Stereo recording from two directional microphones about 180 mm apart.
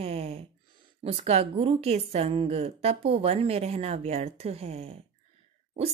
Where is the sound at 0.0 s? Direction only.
35° right (ahead or behind).